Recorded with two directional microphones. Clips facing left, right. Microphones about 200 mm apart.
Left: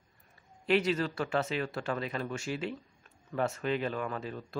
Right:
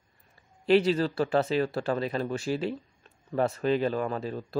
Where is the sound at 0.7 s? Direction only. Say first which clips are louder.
Right 6 dB; 30° right (ahead or behind).